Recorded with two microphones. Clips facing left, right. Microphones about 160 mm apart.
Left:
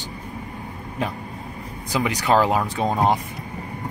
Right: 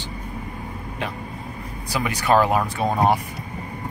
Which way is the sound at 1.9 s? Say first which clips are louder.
Even; 20° left (ahead or behind).